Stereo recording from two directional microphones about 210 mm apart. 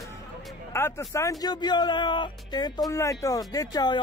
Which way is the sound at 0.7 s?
10° left (ahead or behind).